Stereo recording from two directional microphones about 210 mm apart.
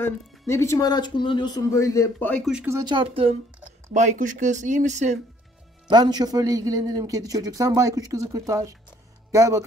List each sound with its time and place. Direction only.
0.0 s speech: 15° left (ahead or behind)
2.5 s a man's voice: 10° right (ahead or behind)
2.8 s speech: 25° right (ahead or behind)
5.9 s a man's voice: 20° right (ahead or behind)